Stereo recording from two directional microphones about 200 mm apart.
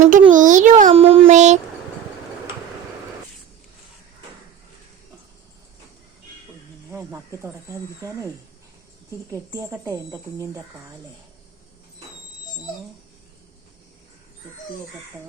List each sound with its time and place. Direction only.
0.0 s a sound: 40° right (ahead or behind)
6.9 s speech: 15° right (ahead or behind)
9.3 s speech: 15° right (ahead or behind)